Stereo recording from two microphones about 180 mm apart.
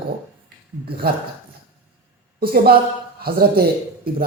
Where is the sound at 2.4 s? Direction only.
60° right (ahead or behind).